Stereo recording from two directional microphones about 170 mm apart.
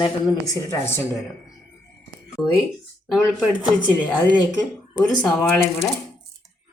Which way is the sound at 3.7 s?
10° right (ahead or behind).